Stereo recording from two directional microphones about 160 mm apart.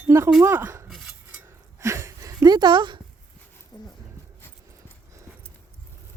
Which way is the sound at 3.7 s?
25° left (ahead or behind).